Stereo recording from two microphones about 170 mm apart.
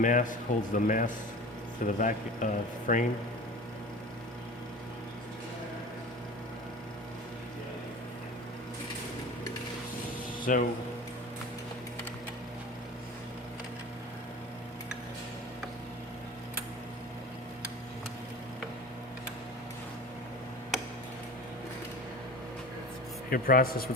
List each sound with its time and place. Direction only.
0.0 s speech: 50° left (ahead or behind)
10.4 s speech: 55° left (ahead or behind)
23.3 s a man's voice: 60° left (ahead or behind)